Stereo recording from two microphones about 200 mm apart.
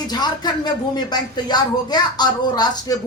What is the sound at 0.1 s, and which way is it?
Speech, 20° left (ahead or behind).